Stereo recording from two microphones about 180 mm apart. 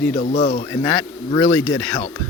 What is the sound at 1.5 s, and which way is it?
Speech, 10° left (ahead or behind).